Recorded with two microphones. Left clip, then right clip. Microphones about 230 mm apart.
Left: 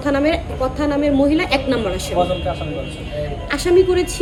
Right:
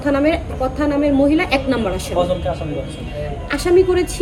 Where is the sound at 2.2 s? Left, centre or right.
Right.